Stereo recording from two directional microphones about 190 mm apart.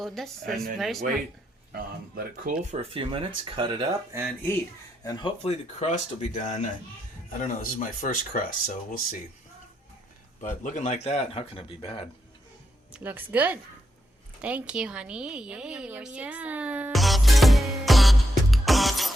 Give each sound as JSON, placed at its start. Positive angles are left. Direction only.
{"t": 0.0, "sound": "speech", "side_deg": 0}
{"t": 1.7, "sound": "speech", "side_deg": -50}
{"t": 2.7, "sound": "speech", "side_deg": -30}
{"t": 5.0, "sound": "speech", "side_deg": 25}
{"t": 10.4, "sound": "speech", "side_deg": 40}
{"t": 12.9, "sound": "speech", "side_deg": -10}
{"t": 14.4, "sound": "a sound", "side_deg": -5}